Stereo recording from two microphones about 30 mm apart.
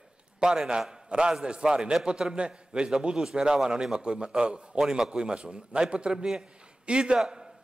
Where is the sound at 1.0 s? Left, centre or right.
Right.